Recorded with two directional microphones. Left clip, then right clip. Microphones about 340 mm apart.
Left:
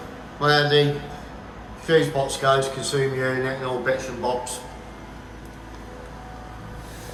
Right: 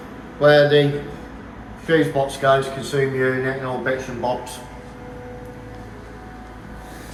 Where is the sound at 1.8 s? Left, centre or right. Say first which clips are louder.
Right 2 dB; centre.